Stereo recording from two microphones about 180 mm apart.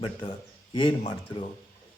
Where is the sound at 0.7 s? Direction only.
25° left (ahead or behind).